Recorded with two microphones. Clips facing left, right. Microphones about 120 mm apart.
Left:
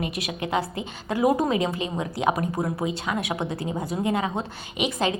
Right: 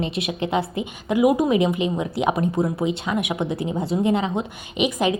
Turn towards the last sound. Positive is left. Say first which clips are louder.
# right 4 dB
turn(degrees=-20)  # may be behind; listen again after turning